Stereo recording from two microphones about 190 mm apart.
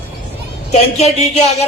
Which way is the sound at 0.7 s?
35° left (ahead or behind).